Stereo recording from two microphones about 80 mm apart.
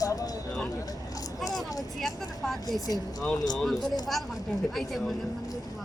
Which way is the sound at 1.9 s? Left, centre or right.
Centre.